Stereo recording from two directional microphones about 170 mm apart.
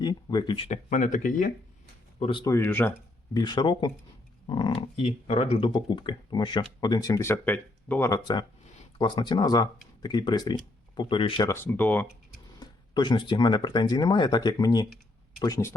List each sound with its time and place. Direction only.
0.0 s speech: 25° left (ahead or behind)
0.7 s speech: 45° left (ahead or behind)
2.1 s speech: 35° left (ahead or behind)
2.4 s speech: 15° left (ahead or behind)
3.3 s speech: 25° left (ahead or behind)
11.4 s speech: 15° left (ahead or behind)
12.5 s speech: 25° left (ahead or behind)